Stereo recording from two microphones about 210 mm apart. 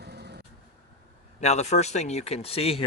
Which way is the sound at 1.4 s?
30° left (ahead or behind).